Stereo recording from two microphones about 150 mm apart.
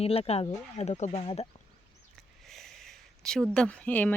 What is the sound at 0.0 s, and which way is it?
A woman's voice, 40° left (ahead or behind).